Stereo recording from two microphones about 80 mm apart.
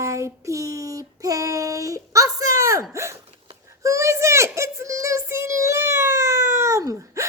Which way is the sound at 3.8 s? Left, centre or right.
Right.